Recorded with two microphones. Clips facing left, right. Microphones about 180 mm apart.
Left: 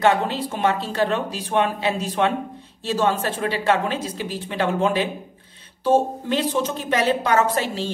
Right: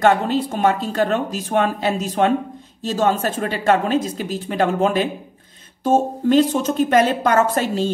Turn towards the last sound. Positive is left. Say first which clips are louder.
# right 3 dB
turn(degrees=-45)  # may be behind; listen again after turning